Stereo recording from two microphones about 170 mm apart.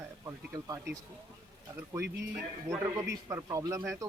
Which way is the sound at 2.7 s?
15° right (ahead or behind).